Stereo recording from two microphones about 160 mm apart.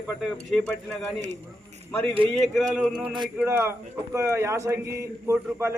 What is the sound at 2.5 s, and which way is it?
Speech, centre (ahead or behind).